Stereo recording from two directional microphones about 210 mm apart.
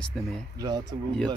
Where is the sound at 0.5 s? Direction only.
20° right (ahead or behind).